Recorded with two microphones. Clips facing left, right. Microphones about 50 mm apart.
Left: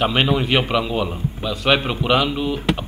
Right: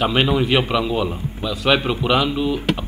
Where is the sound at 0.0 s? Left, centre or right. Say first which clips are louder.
Right 1 dB; centre.